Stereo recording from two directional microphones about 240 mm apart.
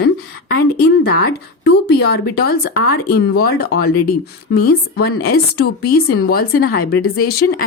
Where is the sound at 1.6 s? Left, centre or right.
Left.